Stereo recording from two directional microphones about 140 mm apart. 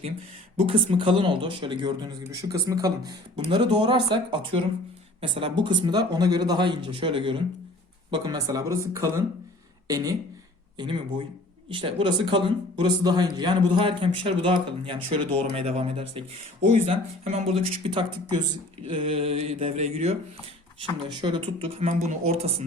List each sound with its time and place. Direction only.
0.6 s speech: 40° right (ahead or behind)
10.8 s speech: 35° right (ahead or behind); by 20.1 s 50° right (ahead or behind)
20.7 s speech: 35° right (ahead or behind)
21.8 s speech: 55° right (ahead or behind)